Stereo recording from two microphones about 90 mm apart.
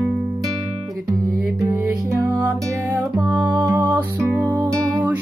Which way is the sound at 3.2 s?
15° right (ahead or behind).